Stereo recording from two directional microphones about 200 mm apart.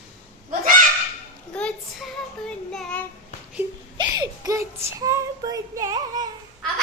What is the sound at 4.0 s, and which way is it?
A child's voice, 20° right (ahead or behind).